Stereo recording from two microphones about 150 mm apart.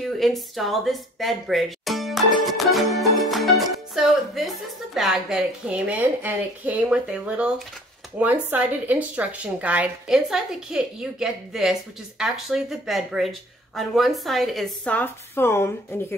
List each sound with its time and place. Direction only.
0.0 s speech: centre (ahead or behind)
3.2 s music: centre (ahead or behind)
4.9 s a woman's voice: 5° right (ahead or behind)
15.0 s a woman's voice: 15° left (ahead or behind)